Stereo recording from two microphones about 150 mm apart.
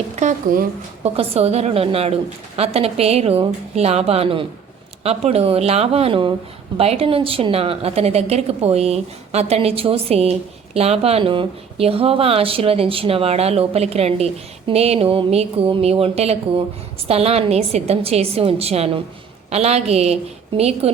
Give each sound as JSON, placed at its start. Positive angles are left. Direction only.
{"t": 0.2, "sound": "a woman's voice", "side_deg": -55}
{"t": 1.0, "sound": "a woman's voice", "side_deg": -40}